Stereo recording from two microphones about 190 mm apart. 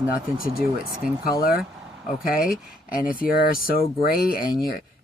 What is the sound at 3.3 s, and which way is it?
Speech, 50° left (ahead or behind).